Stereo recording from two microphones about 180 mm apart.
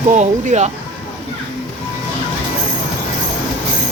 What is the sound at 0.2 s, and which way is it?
Speech, 40° right (ahead or behind).